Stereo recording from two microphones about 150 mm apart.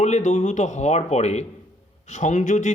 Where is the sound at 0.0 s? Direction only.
50° left (ahead or behind).